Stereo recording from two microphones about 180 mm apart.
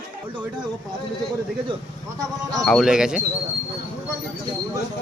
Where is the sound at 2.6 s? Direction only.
Centre (ahead or behind).